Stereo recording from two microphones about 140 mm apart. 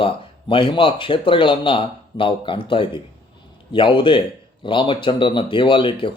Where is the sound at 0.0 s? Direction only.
35° left (ahead or behind).